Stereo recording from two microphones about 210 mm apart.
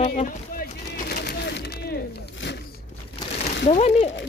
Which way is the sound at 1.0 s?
50° left (ahead or behind).